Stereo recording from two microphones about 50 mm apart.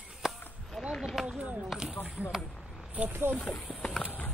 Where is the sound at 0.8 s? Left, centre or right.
Centre.